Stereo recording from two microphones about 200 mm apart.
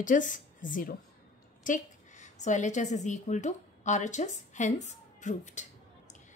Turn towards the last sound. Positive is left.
turn(degrees=35)  # may be behind; listen again after turning